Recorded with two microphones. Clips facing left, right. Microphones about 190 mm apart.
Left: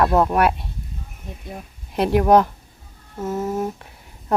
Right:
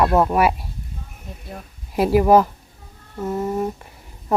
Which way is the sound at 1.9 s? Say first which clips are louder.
Right 1 dB; 5° right (ahead or behind).